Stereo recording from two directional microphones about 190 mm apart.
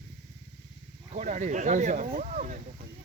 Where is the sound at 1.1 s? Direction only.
40° right (ahead or behind).